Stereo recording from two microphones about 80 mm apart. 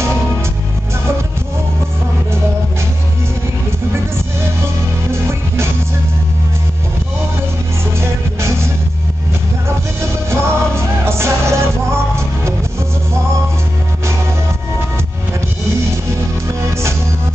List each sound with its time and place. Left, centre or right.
10.3 s music: right